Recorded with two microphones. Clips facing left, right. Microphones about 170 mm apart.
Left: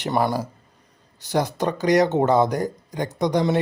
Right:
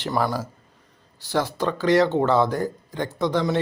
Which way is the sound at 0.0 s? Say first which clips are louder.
Left 2 dB; 25° left (ahead or behind).